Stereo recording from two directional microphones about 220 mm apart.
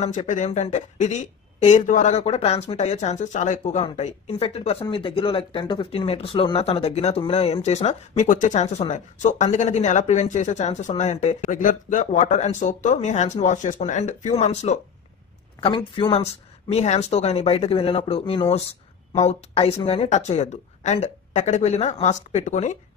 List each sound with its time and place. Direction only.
0.0 s a woman's voice: 35° left (ahead or behind)